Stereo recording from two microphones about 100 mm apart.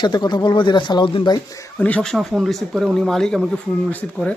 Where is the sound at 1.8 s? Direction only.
10° left (ahead or behind).